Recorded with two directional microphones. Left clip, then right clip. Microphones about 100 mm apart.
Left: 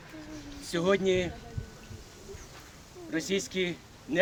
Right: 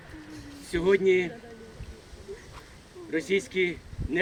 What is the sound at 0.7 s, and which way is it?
Speech, 35° left (ahead or behind).